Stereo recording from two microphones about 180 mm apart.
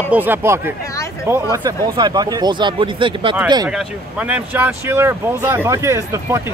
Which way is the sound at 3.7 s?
5° right (ahead or behind).